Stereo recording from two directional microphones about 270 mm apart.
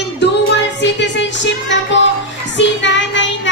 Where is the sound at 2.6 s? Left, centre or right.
Left.